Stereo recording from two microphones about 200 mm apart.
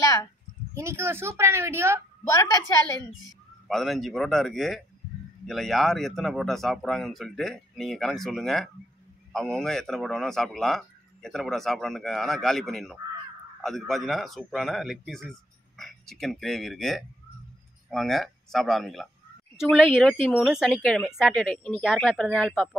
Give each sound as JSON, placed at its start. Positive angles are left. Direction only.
{"t": 0.0, "sound": "a sound", "side_deg": 15}
{"t": 0.7, "sound": "a woman's voice", "side_deg": -15}
{"t": 2.2, "sound": "a woman's voice", "side_deg": 15}
{"t": 3.6, "sound": "a man's voice", "side_deg": 0}